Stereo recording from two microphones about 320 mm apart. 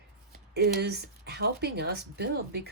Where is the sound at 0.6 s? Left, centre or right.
Right.